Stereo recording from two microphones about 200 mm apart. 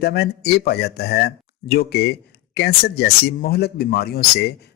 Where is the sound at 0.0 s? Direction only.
55° left (ahead or behind).